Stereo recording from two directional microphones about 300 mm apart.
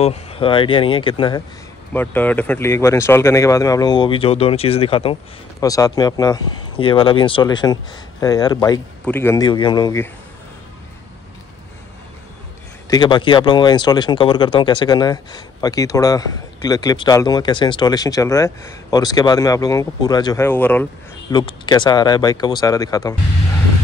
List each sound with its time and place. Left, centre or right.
0.0 s speech: centre
2.0 s speech: centre
12.9 s speech: centre